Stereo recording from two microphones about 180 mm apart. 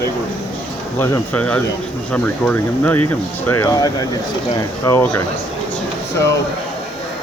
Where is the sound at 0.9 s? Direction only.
15° left (ahead or behind).